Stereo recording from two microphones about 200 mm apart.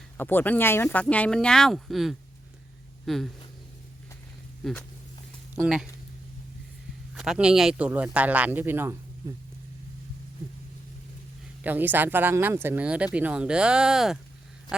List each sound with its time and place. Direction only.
0.2 s speech: 10° left (ahead or behind)
4.6 s speech: 5° left (ahead or behind)
7.1 s speech: 5° right (ahead or behind)
11.6 s speech: 10° right (ahead or behind)